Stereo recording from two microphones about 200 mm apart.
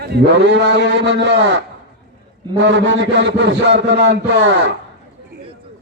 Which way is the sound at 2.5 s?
60° right (ahead or behind).